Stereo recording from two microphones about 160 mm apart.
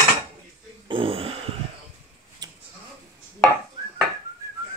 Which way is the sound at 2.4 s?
25° right (ahead or behind).